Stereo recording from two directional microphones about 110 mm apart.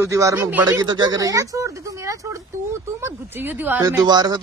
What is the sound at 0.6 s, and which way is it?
Speech, 40° right (ahead or behind).